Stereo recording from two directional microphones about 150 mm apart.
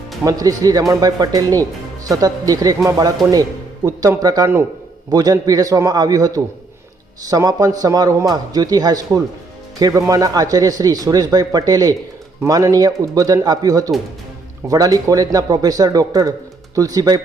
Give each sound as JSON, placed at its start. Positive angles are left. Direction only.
{"t": 0.3, "sound": "speech", "side_deg": -25}